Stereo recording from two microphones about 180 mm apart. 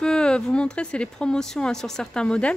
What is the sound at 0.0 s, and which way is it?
A woman's voice, 5° left (ahead or behind).